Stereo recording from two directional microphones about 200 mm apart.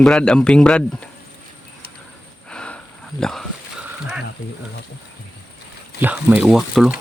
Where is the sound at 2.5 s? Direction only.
5° left (ahead or behind).